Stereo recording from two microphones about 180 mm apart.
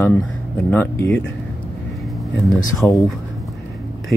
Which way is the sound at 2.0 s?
Centre (ahead or behind).